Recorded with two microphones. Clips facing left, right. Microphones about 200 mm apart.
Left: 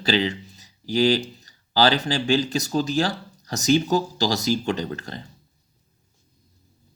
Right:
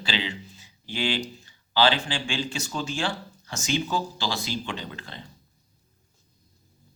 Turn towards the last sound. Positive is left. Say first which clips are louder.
# left 9 dB
turn(degrees=45)  # may be behind; listen again after turning